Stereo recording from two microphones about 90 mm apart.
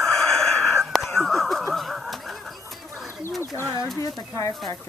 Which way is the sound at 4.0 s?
40° left (ahead or behind).